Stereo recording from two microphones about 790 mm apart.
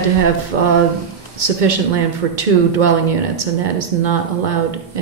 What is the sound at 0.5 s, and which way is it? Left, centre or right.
Speech, right.